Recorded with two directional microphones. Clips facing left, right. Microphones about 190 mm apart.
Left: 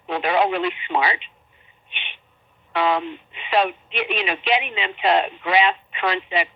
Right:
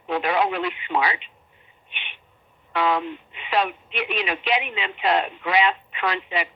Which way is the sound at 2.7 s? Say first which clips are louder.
Left 1 dB; 25° left (ahead or behind).